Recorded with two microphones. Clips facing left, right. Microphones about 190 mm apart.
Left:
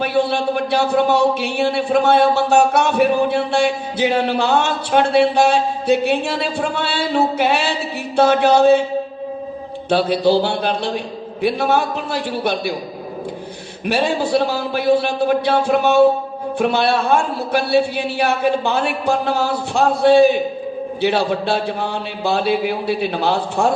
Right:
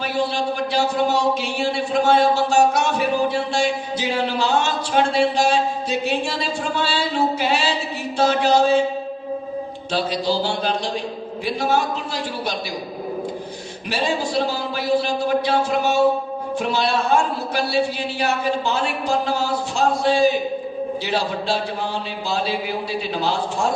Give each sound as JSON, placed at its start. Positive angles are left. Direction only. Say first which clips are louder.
{"t": 0.0, "sound": "speech", "louder": "left 5 dB", "side_deg": 60}
{"t": 9.9, "sound": "speech", "louder": "left 7 dB", "side_deg": 60}
{"t": 13.8, "sound": "speech", "louder": "left 5 dB", "side_deg": 55}